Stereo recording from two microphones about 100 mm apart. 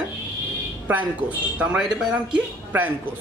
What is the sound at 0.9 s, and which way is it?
A man's voice, 15° right (ahead or behind).